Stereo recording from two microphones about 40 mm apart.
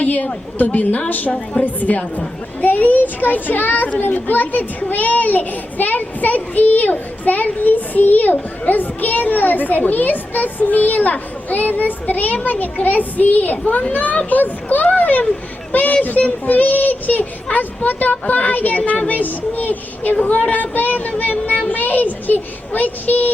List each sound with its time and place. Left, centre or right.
0.0 s a woman's voice: left